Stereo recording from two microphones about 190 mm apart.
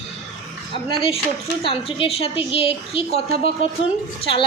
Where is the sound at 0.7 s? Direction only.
30° left (ahead or behind).